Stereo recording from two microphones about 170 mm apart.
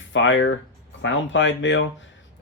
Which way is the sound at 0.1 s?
90° left.